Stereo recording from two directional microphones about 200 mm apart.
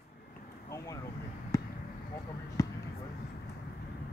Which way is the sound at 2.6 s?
15° left (ahead or behind).